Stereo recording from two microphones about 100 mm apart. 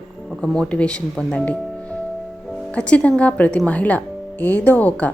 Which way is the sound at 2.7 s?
15° left (ahead or behind).